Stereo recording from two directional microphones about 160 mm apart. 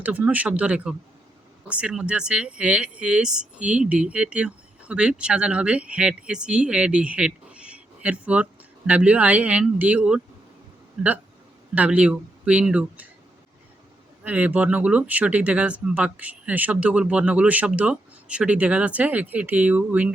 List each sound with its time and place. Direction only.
0.0 s speech: 10° right (ahead or behind)
14.3 s speech: 10° right (ahead or behind)